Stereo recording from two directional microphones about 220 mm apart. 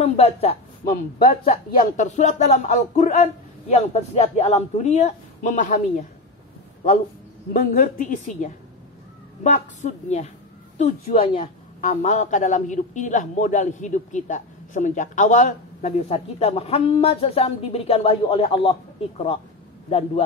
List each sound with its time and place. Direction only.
0.0 s a woman's voice: 30° left (ahead or behind)
7.5 s a man's voice: 35° left (ahead or behind)